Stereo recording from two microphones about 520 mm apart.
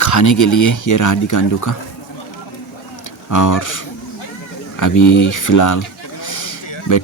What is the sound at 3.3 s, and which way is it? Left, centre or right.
Speech, left.